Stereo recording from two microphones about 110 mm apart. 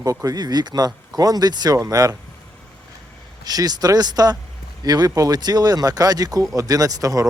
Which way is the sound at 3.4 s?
35° right (ahead or behind).